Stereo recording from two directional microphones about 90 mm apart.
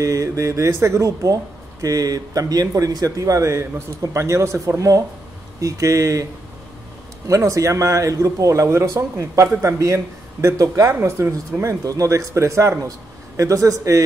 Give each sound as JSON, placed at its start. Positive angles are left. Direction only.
{"t": 0.0, "sound": "speech", "side_deg": -40}
{"t": 7.2, "sound": "speech", "side_deg": -35}
{"t": 11.8, "sound": "speech", "side_deg": -40}